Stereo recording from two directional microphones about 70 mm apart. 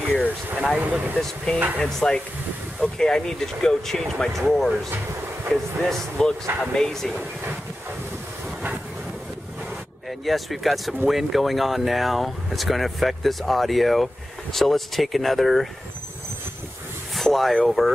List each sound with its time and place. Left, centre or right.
0.7 s speech: right
1.1 s speech: centre
10.0 s speech: centre
17.1 s speech: centre